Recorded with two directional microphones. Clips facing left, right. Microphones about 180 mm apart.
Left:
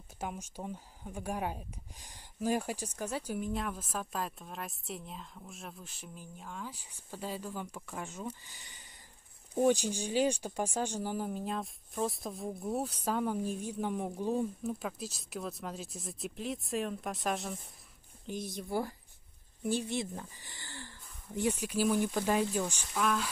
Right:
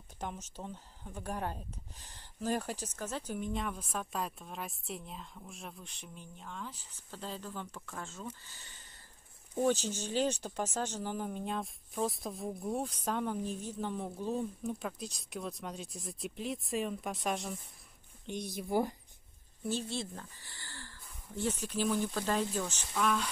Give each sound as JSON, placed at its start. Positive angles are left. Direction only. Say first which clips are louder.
{"t": 0.2, "sound": "speech", "louder": "left 2 dB", "side_deg": 10}
{"t": 18.7, "sound": "speech", "louder": "right 3 dB", "side_deg": -20}
{"t": 19.6, "sound": "speech", "louder": "left 3 dB", "side_deg": 15}